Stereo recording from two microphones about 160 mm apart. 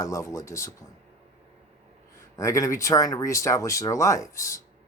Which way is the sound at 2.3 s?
20° left (ahead or behind).